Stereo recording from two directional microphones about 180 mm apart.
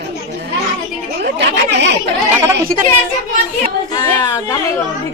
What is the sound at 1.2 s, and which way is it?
Chatter, 70° right (ahead or behind).